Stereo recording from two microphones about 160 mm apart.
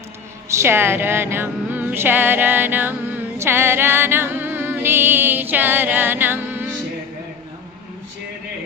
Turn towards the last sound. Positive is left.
turn(degrees=-10)  # may be behind; listen again after turning